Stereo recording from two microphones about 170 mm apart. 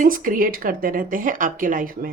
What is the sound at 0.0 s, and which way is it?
Speech, 55° right (ahead or behind).